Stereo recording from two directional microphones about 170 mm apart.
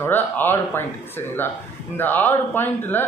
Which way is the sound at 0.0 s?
10° left (ahead or behind).